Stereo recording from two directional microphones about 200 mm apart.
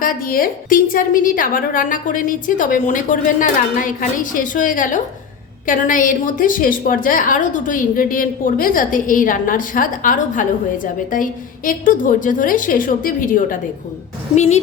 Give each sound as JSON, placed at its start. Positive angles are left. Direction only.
{"t": 0.0, "sound": "a woman's voice", "side_deg": 45}